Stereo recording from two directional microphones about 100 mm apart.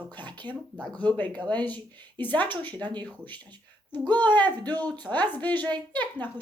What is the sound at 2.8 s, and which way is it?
Speech, 45° right (ahead or behind).